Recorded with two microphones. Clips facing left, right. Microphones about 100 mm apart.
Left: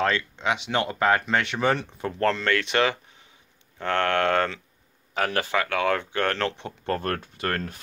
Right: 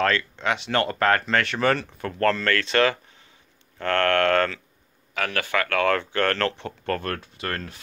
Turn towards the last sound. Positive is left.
turn(degrees=45)  # may be behind; listen again after turning